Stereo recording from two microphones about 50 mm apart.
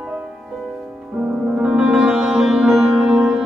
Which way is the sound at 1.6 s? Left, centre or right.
Centre.